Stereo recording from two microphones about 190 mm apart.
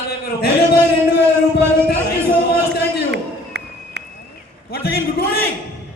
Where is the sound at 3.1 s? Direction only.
60° right (ahead or behind).